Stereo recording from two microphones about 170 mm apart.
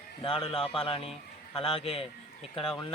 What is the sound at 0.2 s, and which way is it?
Speech, 30° left (ahead or behind).